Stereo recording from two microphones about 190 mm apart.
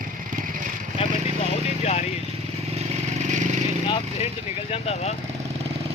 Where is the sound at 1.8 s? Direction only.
35° left (ahead or behind).